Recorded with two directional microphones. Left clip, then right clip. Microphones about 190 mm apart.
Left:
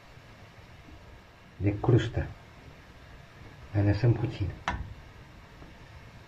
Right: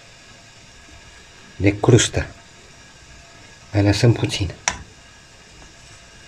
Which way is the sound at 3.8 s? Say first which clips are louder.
Right 12 dB; 45° right (ahead or behind).